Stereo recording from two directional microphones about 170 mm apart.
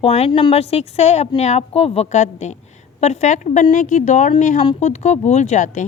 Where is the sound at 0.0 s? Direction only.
35° left (ahead or behind).